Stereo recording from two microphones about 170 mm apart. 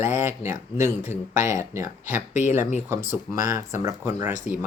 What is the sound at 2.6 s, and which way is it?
Speech, 45° left (ahead or behind).